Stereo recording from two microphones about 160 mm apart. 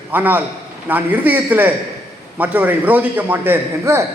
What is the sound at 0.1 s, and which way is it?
A man's voice, 10° right (ahead or behind).